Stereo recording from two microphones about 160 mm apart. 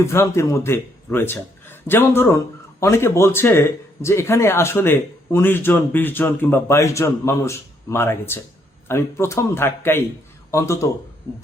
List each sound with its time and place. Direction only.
0.0 s a man's voice: 15° left (ahead or behind)